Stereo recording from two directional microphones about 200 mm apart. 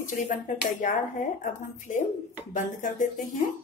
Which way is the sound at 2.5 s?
40° left (ahead or behind).